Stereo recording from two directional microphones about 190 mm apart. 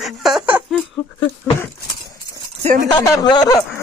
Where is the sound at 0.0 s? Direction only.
Centre (ahead or behind).